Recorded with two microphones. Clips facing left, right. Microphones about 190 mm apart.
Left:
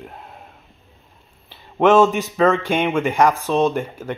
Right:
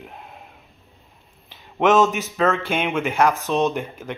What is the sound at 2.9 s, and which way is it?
Speech, 10° left (ahead or behind).